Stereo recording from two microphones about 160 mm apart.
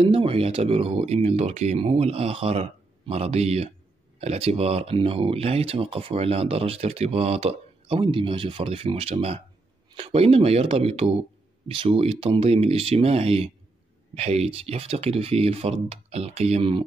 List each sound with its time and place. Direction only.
0.0 s speech: 35° right (ahead or behind)